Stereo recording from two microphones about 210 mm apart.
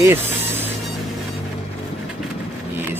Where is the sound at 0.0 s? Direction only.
10° right (ahead or behind).